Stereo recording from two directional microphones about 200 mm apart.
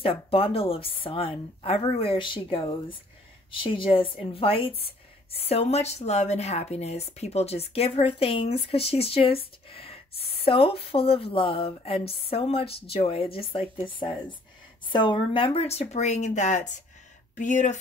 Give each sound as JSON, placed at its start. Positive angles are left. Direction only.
{"t": 0.0, "sound": "a woman's voice", "side_deg": 25}